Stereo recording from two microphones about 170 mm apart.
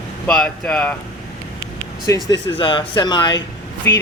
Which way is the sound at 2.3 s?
25° left (ahead or behind).